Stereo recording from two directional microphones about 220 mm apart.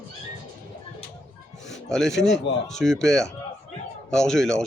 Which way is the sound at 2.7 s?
Centre (ahead or behind).